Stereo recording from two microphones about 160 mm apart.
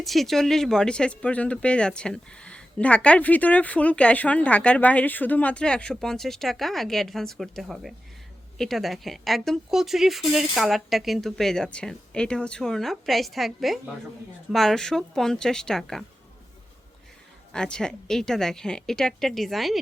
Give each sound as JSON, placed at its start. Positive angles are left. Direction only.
{"t": 0.0, "sound": "speech", "side_deg": 0}
{"t": 17.5, "sound": "speech", "side_deg": 5}